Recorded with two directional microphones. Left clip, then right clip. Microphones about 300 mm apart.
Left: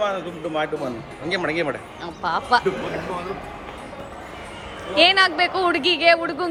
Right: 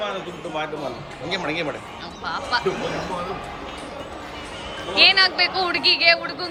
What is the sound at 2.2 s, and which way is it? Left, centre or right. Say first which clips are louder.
Speech: left 5 dB; centre.